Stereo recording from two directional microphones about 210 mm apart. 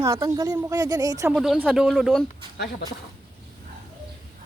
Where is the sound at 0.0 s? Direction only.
15° right (ahead or behind).